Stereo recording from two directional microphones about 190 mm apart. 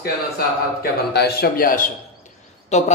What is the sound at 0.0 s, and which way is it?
Speech, 55° left (ahead or behind).